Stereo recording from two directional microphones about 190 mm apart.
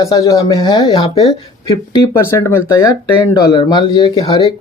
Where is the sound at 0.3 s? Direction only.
20° left (ahead or behind).